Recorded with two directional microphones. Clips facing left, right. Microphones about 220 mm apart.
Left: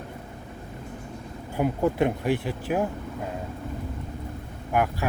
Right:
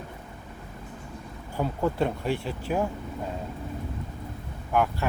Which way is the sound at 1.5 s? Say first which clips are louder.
Left 3 dB; 15° left (ahead or behind).